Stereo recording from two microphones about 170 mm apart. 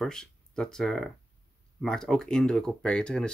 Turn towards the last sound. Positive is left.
turn(degrees=5)  # may be behind; listen again after turning